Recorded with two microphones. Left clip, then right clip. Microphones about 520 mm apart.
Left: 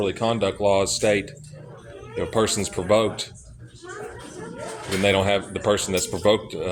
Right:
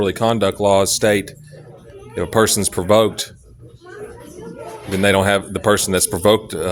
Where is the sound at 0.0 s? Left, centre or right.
Right.